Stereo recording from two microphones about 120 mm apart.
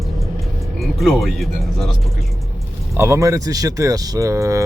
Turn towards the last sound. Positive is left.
turn(degrees=-25)  # may be behind; listen again after turning